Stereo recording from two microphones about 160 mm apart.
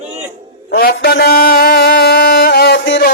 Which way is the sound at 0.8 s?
70° left (ahead or behind).